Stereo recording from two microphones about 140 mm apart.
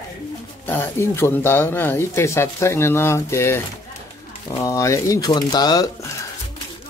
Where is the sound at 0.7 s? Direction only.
15° left (ahead or behind).